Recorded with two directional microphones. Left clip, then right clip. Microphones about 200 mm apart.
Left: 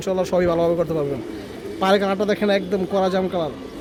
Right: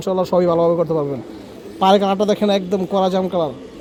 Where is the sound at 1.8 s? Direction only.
30° right (ahead or behind).